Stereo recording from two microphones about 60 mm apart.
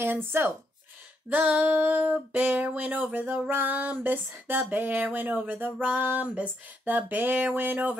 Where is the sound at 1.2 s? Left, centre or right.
Right.